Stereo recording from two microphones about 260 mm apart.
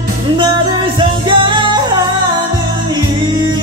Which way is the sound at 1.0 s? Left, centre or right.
Centre.